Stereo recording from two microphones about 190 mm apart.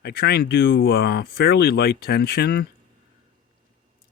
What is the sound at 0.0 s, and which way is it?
Speech, 55° left (ahead or behind).